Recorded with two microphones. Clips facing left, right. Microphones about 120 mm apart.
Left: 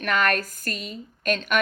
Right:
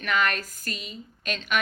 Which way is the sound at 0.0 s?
55° left (ahead or behind).